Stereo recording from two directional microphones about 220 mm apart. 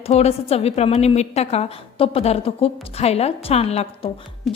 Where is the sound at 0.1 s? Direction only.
30° left (ahead or behind).